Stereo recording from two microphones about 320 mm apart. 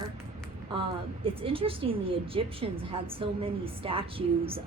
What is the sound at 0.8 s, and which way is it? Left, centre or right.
Speech, centre.